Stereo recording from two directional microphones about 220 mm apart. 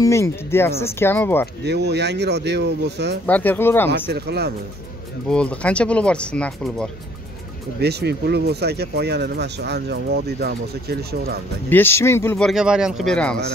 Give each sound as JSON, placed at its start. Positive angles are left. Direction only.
{"t": 0.0, "sound": "speech", "side_deg": 10}
{"t": 1.6, "sound": "speech", "side_deg": -50}
{"t": 3.3, "sound": "speech", "side_deg": 5}
{"t": 4.1, "sound": "speech", "side_deg": -45}
{"t": 5.3, "sound": "speech", "side_deg": 5}
{"t": 7.8, "sound": "speech", "side_deg": -50}
{"t": 11.7, "sound": "speech", "side_deg": 10}